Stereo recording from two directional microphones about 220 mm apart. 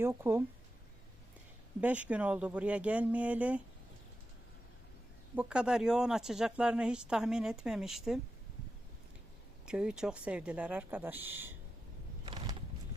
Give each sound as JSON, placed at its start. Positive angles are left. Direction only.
{"t": 0.0, "sound": "speech", "side_deg": -10}
{"t": 1.8, "sound": "speech", "side_deg": -5}
{"t": 5.3, "sound": "speech", "side_deg": -5}
{"t": 9.6, "sound": "speech", "side_deg": -5}
{"t": 12.2, "sound": "a sound", "side_deg": -20}